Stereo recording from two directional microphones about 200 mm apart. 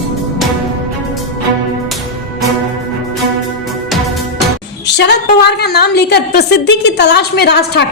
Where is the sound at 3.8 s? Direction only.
Centre (ahead or behind).